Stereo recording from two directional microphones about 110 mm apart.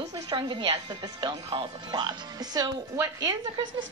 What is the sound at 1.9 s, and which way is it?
Speech, 40° right (ahead or behind).